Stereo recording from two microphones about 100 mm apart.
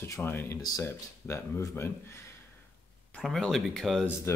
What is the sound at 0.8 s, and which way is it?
Speech, 25° left (ahead or behind).